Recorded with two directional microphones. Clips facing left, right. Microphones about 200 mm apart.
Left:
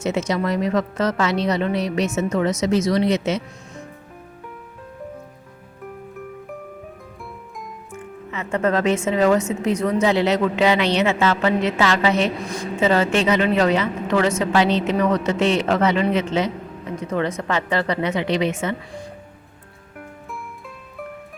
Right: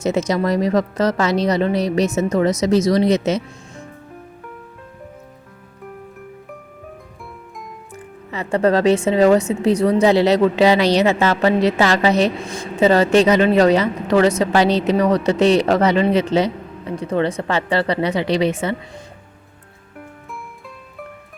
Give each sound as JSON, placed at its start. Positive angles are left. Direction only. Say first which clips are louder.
{"t": 0.0, "sound": "speech", "louder": "right 3 dB", "side_deg": -40}
{"t": 7.9, "sound": "speech", "louder": "right 2 dB", "side_deg": -35}